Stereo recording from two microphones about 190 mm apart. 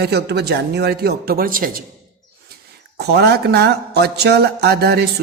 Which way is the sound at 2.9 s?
60° right (ahead or behind).